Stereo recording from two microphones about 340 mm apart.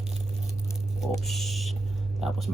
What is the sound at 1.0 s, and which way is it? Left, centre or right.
Speech, centre.